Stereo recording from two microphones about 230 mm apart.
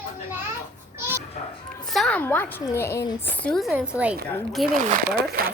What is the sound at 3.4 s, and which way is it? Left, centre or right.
A woman's voice, centre.